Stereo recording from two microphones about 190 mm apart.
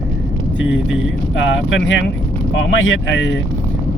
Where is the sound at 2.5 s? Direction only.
90° left.